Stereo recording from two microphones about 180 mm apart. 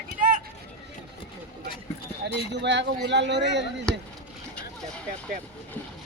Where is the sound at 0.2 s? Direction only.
45° right (ahead or behind).